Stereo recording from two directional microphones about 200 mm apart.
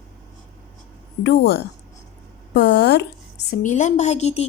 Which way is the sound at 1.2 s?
60° left (ahead or behind).